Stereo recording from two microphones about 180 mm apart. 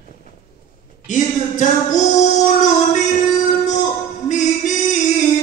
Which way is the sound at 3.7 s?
45° left (ahead or behind).